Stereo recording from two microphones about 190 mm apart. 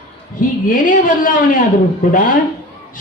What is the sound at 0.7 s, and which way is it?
Speech, 45° left (ahead or behind).